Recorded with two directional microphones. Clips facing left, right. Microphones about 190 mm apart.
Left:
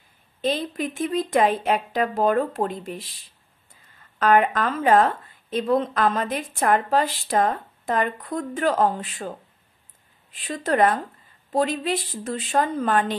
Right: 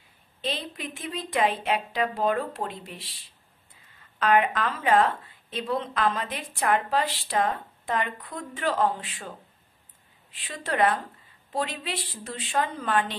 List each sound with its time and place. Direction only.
0.4 s a woman's voice: 45° left (ahead or behind)
4.2 s a woman's voice: 45° left (ahead or behind)
10.3 s a woman's voice: 45° left (ahead or behind)